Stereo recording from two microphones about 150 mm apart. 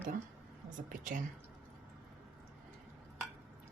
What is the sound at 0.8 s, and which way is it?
Speech, 60° right (ahead or behind).